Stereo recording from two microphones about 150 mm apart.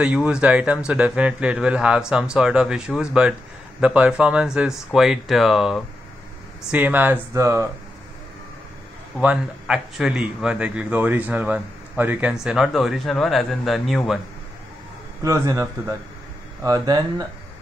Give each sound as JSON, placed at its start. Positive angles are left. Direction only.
{"t": 0.0, "sound": "speech", "side_deg": -5}
{"t": 9.2, "sound": "speech", "side_deg": -5}
{"t": 15.2, "sound": "a man's voice", "side_deg": -20}